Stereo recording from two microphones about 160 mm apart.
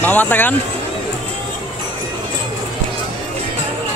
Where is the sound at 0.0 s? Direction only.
10° left (ahead or behind).